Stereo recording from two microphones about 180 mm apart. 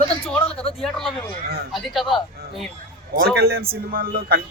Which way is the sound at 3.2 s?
60° right (ahead or behind).